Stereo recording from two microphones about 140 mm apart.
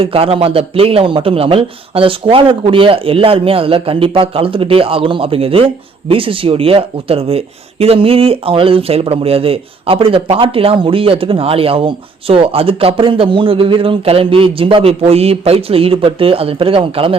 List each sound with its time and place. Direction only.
0.0 s a man's voice: 45° right (ahead or behind)